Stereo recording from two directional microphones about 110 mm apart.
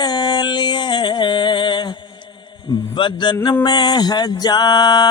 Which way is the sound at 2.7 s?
45° left (ahead or behind).